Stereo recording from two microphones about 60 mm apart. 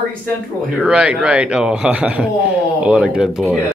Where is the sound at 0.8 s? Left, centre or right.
Centre.